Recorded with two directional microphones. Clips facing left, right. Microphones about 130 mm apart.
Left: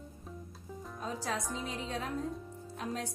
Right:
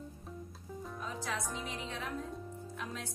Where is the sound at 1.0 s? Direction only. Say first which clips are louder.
Left 4 dB; 35° left (ahead or behind).